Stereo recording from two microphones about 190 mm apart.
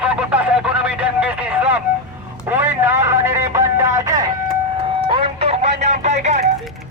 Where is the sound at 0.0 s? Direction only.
5° right (ahead or behind).